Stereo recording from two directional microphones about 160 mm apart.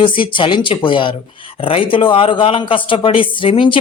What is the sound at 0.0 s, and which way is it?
A man's voice, 30° left (ahead or behind).